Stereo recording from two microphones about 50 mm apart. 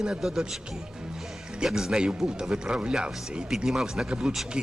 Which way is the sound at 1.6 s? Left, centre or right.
Centre.